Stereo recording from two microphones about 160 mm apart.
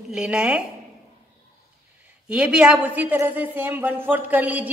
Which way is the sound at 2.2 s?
5° right (ahead or behind).